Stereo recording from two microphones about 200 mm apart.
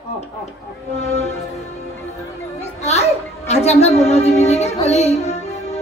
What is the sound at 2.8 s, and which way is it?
A child's voice, 30° left (ahead or behind).